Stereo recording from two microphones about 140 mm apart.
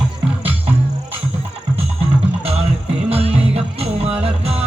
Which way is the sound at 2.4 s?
45° right (ahead or behind).